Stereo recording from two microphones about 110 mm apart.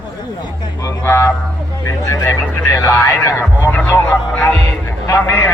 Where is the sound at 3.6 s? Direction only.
15° left (ahead or behind).